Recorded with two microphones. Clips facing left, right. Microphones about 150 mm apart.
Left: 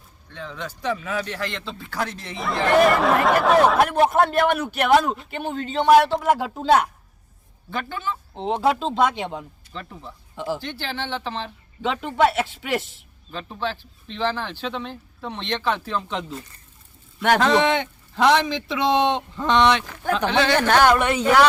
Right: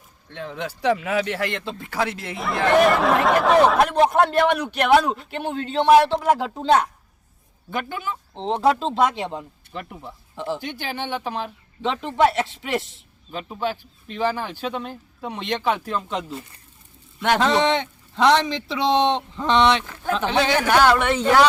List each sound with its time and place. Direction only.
0.4 s speech: 50° right (ahead or behind)
0.8 s speech: 70° right (ahead or behind); by 2.3 s 50° right (ahead or behind)
2.3 s speech: centre (ahead or behind)
7.7 s speech: 15° right (ahead or behind)
8.4 s speech: 5° left (ahead or behind)
9.7 s speech: 15° right (ahead or behind)
10.3 s speech: 5° left (ahead or behind)
10.6 s speech: 15° right (ahead or behind)
11.8 s speech: centre (ahead or behind)
13.3 s speech: 15° right (ahead or behind)
17.7 s speech: centre (ahead or behind)
19.8 s a woman's voice: 15° left (ahead or behind)
20.1 s speech: 5° right (ahead or behind)
20.8 s a woman's voice: 15° left (ahead or behind)